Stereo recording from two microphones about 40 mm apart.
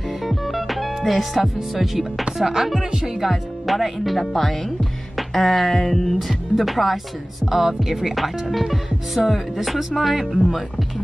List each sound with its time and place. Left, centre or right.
0.2 s music: centre
2.3 s speech: centre
3.3 s music: centre
4.2 s speech: centre
5.1 s music: centre